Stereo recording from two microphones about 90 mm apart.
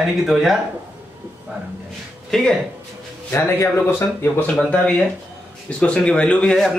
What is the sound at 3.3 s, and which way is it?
Speech, 30° left (ahead or behind).